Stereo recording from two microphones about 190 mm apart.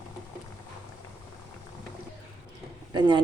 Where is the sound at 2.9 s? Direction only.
25° right (ahead or behind).